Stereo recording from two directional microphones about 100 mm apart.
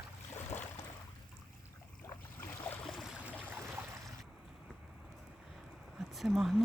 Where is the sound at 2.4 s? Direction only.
20° left (ahead or behind).